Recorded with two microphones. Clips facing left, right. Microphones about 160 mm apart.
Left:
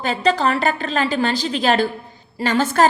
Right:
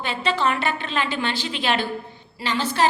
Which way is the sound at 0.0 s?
40° left (ahead or behind).